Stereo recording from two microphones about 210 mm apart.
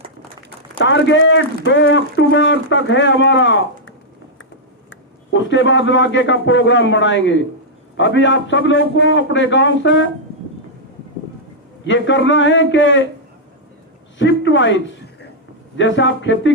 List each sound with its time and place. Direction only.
0.9 s a man's voice: 60° left (ahead or behind)
11.9 s speech: 60° left (ahead or behind)
14.2 s speech: 60° left (ahead or behind)
15.8 s speech: 60° left (ahead or behind)